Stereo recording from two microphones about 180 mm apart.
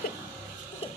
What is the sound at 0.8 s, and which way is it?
Ratchet, 30° left (ahead or behind).